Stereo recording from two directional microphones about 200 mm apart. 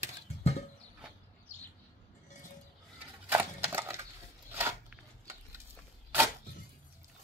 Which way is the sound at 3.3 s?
10° right (ahead or behind).